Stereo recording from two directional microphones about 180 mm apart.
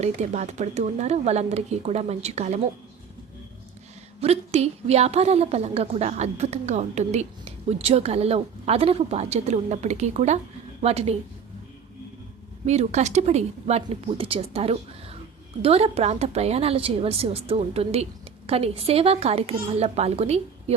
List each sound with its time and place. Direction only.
0.0 s a woman's voice: 40° right (ahead or behind)
4.2 s a woman's voice: 35° right (ahead or behind)
12.6 s a woman's voice: 35° right (ahead or behind)